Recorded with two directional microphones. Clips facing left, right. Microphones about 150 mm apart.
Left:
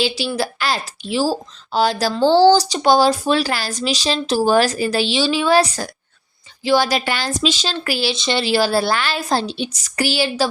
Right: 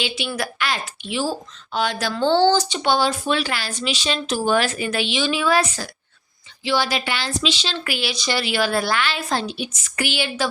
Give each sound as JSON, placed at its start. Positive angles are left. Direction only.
{"t": 0.3, "sound": "a woman's voice", "side_deg": 30}